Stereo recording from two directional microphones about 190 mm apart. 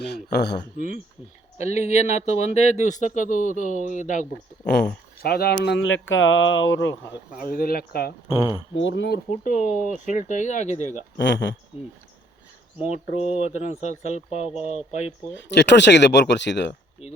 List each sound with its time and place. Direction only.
0.0 s speech: 60° left (ahead or behind)
1.5 s speech: 35° left (ahead or behind)
4.7 s speech: 55° left (ahead or behind)
5.6 s speech: 80° left
7.5 s speech: 50° left (ahead or behind)
8.3 s speech: 30° left (ahead or behind)
8.7 s speech: 75° left (ahead or behind)
9.3 s speech: 45° left (ahead or behind)
11.2 s speech: 70° left (ahead or behind)
13.1 s speech: 35° left (ahead or behind)
15.3 s speech: 70° left (ahead or behind)